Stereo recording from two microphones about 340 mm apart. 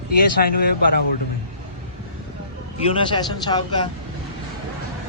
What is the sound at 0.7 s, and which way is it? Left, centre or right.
Speech, left.